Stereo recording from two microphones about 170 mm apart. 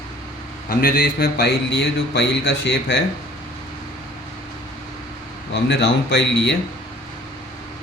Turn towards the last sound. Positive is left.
turn(degrees=90)